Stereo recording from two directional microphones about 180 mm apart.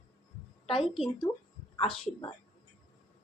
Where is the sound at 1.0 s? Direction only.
25° left (ahead or behind).